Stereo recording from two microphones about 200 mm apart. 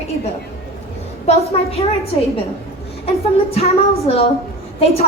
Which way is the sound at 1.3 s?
30° left (ahead or behind).